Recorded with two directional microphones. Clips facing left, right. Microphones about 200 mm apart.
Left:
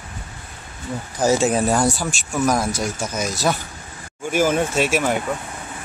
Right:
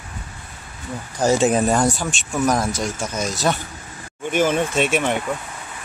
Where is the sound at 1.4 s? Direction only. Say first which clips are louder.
Right 1 dB; centre (ahead or behind).